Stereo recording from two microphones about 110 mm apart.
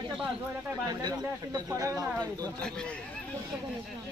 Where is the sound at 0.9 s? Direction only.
35° right (ahead or behind).